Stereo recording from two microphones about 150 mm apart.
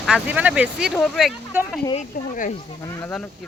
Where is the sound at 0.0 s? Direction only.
5° right (ahead or behind).